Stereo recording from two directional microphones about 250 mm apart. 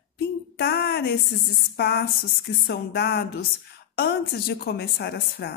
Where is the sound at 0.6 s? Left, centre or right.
Left.